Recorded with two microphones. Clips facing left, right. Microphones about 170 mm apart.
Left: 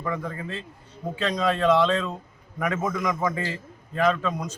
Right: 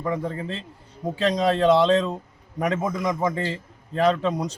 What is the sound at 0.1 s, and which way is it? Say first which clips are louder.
A man's voice: right 4 dB; 30° right (ahead or behind).